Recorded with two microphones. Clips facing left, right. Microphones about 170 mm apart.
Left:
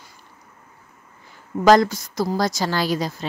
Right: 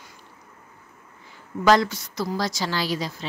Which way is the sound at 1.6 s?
40° left (ahead or behind).